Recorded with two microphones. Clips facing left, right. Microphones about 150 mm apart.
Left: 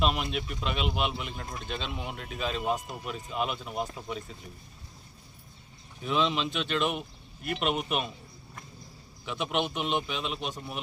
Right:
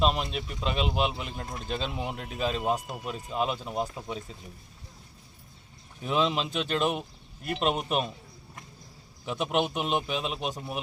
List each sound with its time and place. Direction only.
0.0 s speech: 30° right (ahead or behind)
6.1 s speech: 40° right (ahead or behind)
9.2 s speech: 40° right (ahead or behind)